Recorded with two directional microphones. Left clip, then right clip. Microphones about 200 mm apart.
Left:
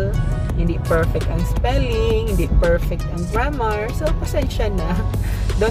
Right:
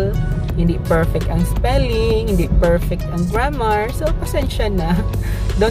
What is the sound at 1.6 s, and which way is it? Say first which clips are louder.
Speech: right 3 dB; 25° right (ahead or behind).